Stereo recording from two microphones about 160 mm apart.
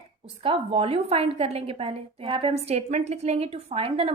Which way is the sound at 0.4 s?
35° right (ahead or behind).